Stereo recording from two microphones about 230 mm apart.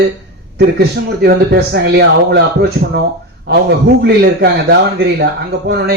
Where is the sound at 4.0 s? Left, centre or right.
Right.